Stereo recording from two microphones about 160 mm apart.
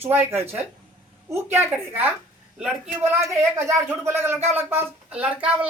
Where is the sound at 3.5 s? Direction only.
15° right (ahead or behind).